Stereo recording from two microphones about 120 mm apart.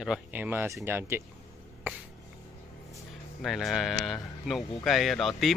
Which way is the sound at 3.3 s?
Centre (ahead or behind).